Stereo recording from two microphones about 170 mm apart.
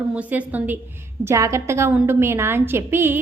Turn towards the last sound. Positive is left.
turn(degrees=-15)  # may be behind; listen again after turning